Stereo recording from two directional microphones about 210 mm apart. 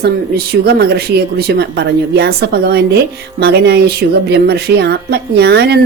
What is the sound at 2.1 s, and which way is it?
A woman's voice, 50° right (ahead or behind).